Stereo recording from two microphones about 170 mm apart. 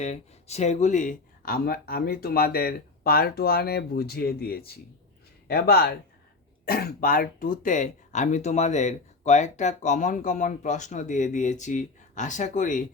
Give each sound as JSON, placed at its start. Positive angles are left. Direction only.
{"t": 0.0, "sound": "speech", "side_deg": 40}